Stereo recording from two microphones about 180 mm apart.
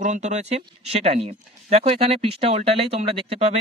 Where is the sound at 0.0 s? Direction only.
40° right (ahead or behind).